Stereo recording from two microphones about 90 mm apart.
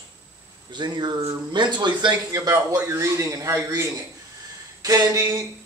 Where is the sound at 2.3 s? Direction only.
45° right (ahead or behind).